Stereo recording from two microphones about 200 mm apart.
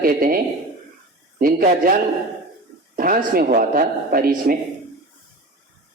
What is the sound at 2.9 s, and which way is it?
A man's voice, 45° right (ahead or behind).